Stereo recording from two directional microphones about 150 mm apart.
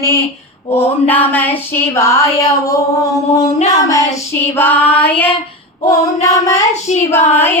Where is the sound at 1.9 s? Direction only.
20° left (ahead or behind).